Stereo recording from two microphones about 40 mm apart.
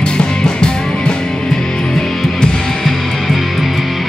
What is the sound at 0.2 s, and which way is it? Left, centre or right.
Music, left.